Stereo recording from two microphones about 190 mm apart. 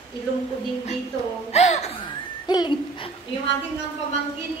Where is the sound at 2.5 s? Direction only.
25° left (ahead or behind).